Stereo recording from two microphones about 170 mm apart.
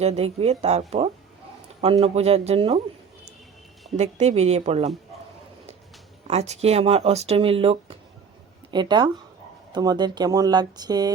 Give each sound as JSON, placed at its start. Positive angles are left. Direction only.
{"t": 0.0, "sound": "speech", "side_deg": -35}
{"t": 3.9, "sound": "speech", "side_deg": -40}
{"t": 6.2, "sound": "speech", "side_deg": -40}